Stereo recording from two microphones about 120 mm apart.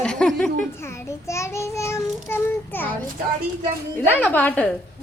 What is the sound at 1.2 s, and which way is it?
Child singing, 25° left (ahead or behind).